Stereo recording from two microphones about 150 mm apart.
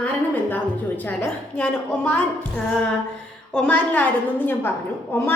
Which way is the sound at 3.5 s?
10° left (ahead or behind).